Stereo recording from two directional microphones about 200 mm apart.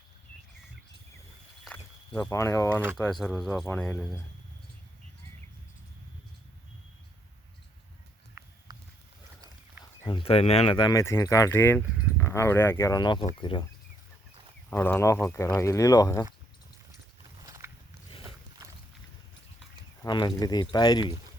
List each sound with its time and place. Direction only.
1.6 s a sound: 5° left (ahead or behind)
3.0 s speech: 5° left (ahead or behind)
10.0 s speech: 25° left (ahead or behind)
14.7 s speech: 10° left (ahead or behind)
17.4 s a sound: 15° right (ahead or behind)
20.0 s speech: 20° left (ahead or behind)